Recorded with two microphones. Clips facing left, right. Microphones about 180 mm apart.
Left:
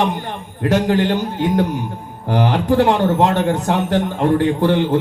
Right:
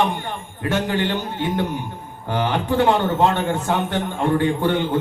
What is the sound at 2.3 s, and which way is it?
Speech, 40° left (ahead or behind).